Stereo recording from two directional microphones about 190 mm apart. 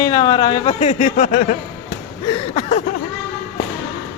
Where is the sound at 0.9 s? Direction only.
45° left (ahead or behind).